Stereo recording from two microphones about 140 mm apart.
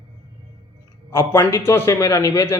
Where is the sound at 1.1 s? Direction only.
15° left (ahead or behind).